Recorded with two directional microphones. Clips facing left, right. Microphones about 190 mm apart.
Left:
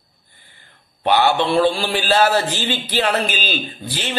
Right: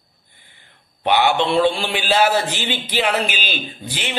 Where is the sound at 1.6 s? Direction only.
15° right (ahead or behind).